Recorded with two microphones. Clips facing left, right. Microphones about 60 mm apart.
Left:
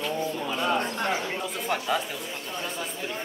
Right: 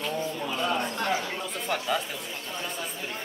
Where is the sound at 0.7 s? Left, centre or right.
Left.